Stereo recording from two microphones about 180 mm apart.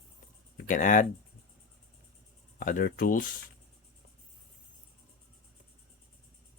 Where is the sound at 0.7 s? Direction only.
45° left (ahead or behind).